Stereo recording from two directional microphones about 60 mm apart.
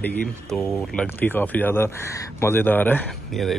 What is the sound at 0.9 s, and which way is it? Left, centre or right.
Speech, left.